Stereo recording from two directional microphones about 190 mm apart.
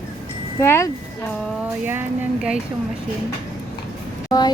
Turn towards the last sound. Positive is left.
turn(degrees=20)  # may be behind; listen again after turning